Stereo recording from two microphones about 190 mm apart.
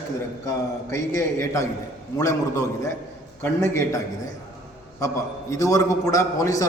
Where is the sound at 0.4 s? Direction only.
15° left (ahead or behind).